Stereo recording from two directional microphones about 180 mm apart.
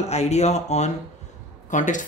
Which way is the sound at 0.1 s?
35° left (ahead or behind).